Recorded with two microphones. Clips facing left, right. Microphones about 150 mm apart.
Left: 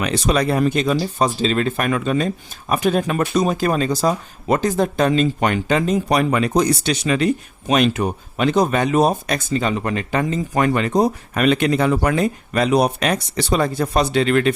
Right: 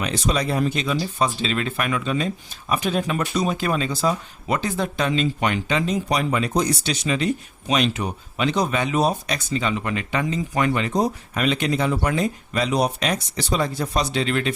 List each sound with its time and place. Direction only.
0.0 s speech: 60° left (ahead or behind)